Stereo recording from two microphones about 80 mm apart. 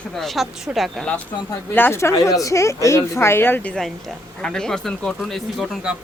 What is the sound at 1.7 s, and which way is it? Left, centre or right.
Speech, left.